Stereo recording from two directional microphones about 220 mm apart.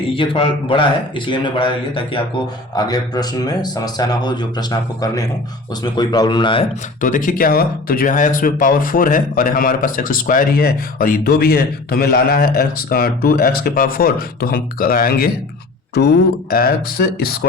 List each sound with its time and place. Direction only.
0.2 s speech: 25° left (ahead or behind)
2.7 s speech: 15° left (ahead or behind)
7.0 s speech: 35° left (ahead or behind)